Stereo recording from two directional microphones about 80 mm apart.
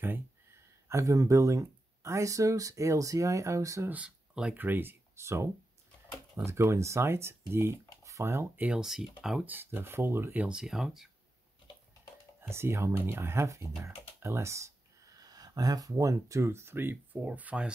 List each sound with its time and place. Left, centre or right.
0.8 s speech: right
3.9 s speech: centre
4.6 s speech: right
8.5 s speech: centre; by 10.3 s right
10.3 s speech: centre
12.4 s speech: right
13.8 s a sound: right
15.9 s speech: right; by 17.7 s centre